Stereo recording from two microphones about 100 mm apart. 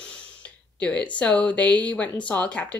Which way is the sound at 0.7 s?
15° left (ahead or behind).